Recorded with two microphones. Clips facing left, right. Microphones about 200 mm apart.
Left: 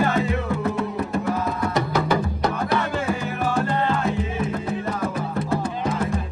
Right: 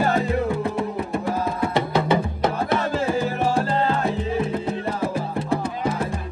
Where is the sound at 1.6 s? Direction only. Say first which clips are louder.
Right 1 dB; 25° right (ahead or behind).